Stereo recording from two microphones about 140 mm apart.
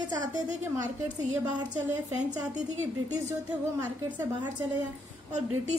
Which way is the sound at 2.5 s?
55° right (ahead or behind).